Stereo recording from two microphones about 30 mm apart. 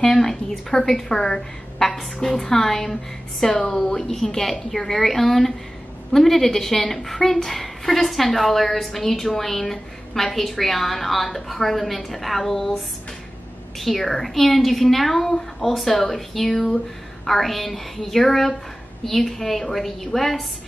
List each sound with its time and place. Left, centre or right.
0.0 s a woman's voice: centre
13.7 s a woman's voice: centre